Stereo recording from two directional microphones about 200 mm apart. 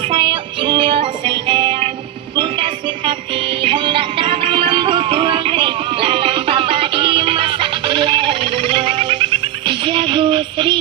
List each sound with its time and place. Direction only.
0.1 s music: 25° right (ahead or behind)